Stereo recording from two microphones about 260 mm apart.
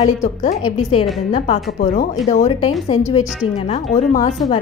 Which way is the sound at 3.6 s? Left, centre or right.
Left.